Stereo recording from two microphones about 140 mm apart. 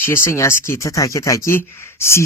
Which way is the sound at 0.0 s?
20° left (ahead or behind).